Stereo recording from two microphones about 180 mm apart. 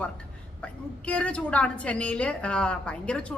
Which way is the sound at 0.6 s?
5° left (ahead or behind).